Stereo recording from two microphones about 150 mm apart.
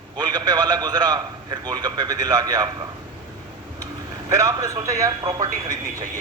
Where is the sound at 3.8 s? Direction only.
20° right (ahead or behind).